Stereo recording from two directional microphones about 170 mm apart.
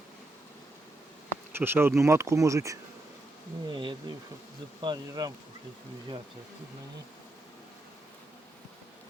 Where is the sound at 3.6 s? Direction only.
25° right (ahead or behind).